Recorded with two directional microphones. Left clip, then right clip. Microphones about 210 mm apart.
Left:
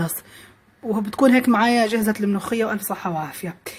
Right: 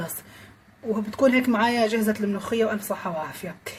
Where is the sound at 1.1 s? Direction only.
35° left (ahead or behind).